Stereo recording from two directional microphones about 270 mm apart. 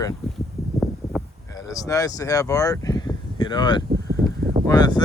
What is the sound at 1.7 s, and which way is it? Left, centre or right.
Speech, centre.